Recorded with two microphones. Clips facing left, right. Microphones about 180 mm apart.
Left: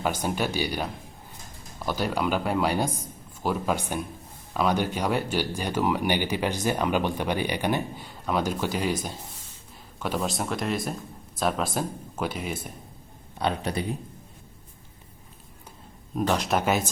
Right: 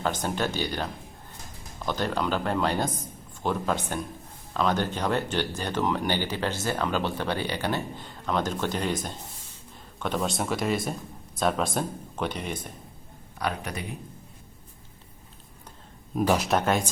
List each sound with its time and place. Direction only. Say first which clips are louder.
0.0 s speech: left 1 dB; 10° left (ahead or behind)
13.4 s speech: left 4 dB; 30° left (ahead or behind)
16.1 s speech: right 1 dB; 5° right (ahead or behind)